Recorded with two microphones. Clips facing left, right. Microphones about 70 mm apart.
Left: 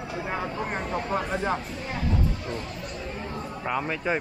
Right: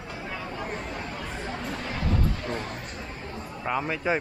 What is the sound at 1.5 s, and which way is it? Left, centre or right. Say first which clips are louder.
Speech: right 1 dB; right.